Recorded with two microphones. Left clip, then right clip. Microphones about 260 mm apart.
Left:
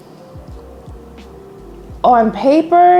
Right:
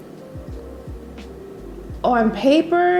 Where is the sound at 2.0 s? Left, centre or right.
Left.